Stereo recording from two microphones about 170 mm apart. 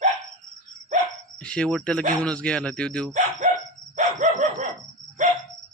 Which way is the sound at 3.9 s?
45° right (ahead or behind).